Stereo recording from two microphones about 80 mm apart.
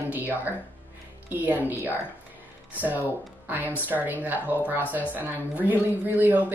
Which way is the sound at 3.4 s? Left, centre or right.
Right.